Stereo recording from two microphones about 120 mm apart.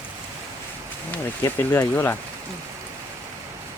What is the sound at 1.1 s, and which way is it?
Speech, 20° left (ahead or behind).